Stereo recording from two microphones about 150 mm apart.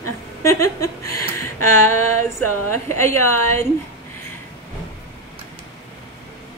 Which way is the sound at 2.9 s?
15° left (ahead or behind).